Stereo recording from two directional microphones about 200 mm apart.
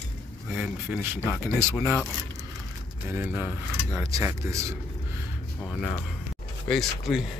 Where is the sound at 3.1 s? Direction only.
10° right (ahead or behind).